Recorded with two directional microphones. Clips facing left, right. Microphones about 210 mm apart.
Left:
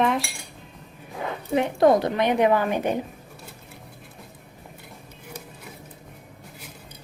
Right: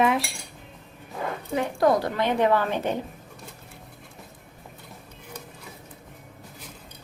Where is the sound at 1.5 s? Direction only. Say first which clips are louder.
Left 4 dB; 20° left (ahead or behind).